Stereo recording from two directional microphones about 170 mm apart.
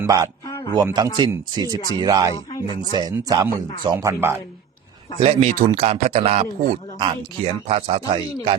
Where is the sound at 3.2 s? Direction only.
20° right (ahead or behind).